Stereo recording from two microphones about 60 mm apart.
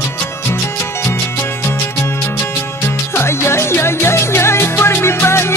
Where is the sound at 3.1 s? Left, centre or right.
Left.